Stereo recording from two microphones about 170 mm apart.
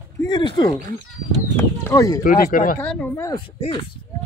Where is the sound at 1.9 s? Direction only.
20° left (ahead or behind).